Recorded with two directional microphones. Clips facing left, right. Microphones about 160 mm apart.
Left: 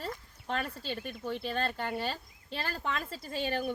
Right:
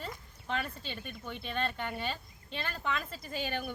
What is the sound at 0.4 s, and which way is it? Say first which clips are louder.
Speech: left 2 dB; 40° left (ahead or behind).